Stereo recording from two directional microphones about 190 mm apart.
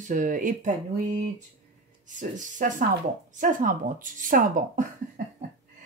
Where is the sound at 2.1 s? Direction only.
40° right (ahead or behind).